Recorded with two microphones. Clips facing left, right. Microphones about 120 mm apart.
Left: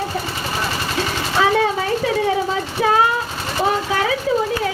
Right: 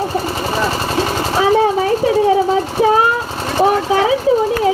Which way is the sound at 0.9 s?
30° right (ahead or behind).